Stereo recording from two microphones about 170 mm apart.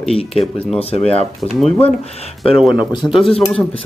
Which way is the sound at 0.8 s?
35° left (ahead or behind).